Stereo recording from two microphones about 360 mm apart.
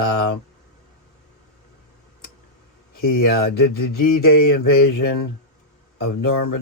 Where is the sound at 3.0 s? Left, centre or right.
Left.